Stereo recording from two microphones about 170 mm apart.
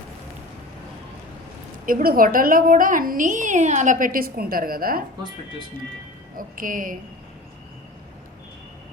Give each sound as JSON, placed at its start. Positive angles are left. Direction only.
{"t": 1.9, "sound": "a woman's voice", "side_deg": -55}
{"t": 6.3, "sound": "a woman's voice", "side_deg": -55}